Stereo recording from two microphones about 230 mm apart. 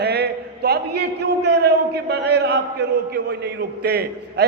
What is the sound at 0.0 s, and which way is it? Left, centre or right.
A man's voice, right.